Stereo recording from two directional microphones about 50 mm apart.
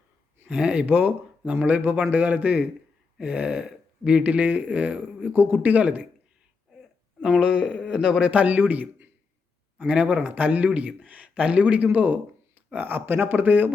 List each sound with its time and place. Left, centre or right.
0.4 s speech: right
4.2 s speech: right
7.3 s a man's voice: centre
8.2 s speech: right
8.5 s speech: right
9.7 s speech: right